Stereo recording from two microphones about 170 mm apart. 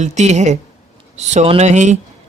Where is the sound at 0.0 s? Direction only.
45° right (ahead or behind).